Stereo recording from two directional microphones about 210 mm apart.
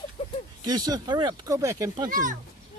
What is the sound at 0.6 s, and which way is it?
Speech, 20° right (ahead or behind).